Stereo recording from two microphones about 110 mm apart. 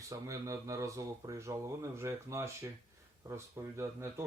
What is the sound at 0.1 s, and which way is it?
Speech, 30° right (ahead or behind).